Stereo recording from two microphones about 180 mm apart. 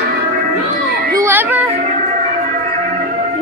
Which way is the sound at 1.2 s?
10° right (ahead or behind).